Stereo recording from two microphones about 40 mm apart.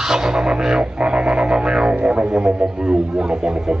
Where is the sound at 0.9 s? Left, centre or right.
Right.